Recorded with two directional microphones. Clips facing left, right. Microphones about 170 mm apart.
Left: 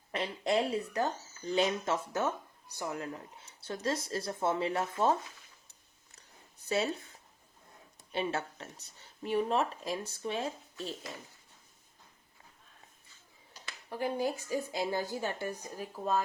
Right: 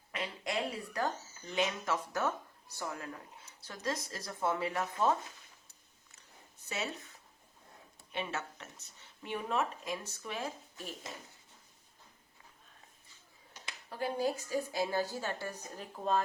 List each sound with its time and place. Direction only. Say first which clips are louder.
0.1 s a sound: left 7 dB; 30° left (ahead or behind)
1.5 s speech: left 3 dB; 30° left (ahead or behind)
6.7 s speech: left 8 dB; 35° left (ahead or behind)
8.1 s speech: left 5 dB; 30° left (ahead or behind)
11.1 s speech: left 2 dB; 20° right (ahead or behind)
14.0 s a woman's voice: left 1 dB; 15° left (ahead or behind)
15.8 s a woman's voice: even; 5° left (ahead or behind)